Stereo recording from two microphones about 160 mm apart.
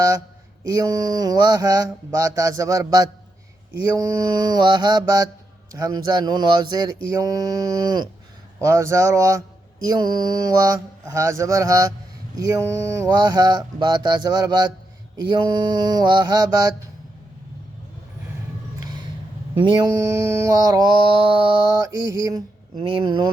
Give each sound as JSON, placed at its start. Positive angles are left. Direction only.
{"t": 0.7, "sound": "mantra", "side_deg": -25}
{"t": 8.5, "sound": "speech", "side_deg": -20}
{"t": 9.8, "sound": "mantra", "side_deg": -25}
{"t": 19.5, "sound": "mantra", "side_deg": -30}